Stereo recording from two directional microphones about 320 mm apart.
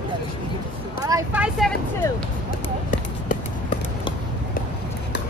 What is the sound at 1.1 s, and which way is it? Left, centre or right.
Vehicle, centre.